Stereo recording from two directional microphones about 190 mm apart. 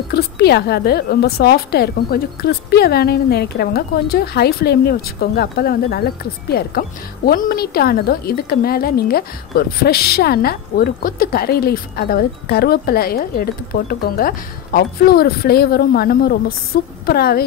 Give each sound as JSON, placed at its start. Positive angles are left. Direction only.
{"t": 0.1, "sound": "a woman's voice", "side_deg": 60}